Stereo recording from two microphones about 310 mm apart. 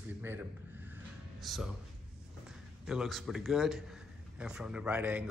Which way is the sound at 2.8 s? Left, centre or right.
Centre.